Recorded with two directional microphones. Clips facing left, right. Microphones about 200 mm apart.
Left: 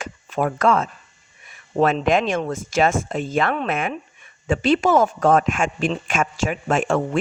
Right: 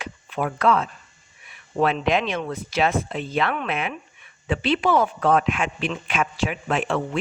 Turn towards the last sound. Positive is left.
turn(degrees=45)  # may be behind; listen again after turning